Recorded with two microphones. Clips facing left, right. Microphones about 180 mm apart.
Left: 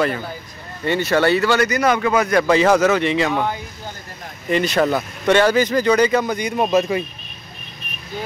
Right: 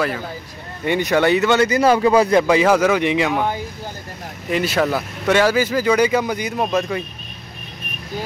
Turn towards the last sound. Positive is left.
turn(degrees=5)  # may be behind; listen again after turning